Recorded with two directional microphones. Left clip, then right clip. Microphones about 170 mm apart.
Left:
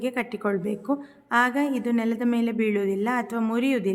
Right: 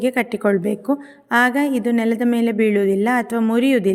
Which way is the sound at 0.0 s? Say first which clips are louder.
Right 8 dB; 30° right (ahead or behind).